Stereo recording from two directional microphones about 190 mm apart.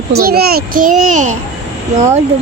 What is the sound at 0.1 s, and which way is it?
A child's voice, 55° right (ahead or behind).